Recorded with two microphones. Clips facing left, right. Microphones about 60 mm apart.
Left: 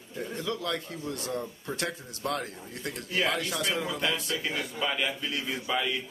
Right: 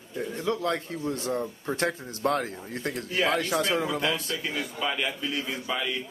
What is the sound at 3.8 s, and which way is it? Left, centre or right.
A man's voice, centre.